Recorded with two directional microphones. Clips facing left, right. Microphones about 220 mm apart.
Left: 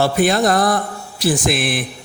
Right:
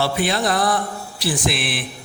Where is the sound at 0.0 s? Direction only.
45° left (ahead or behind).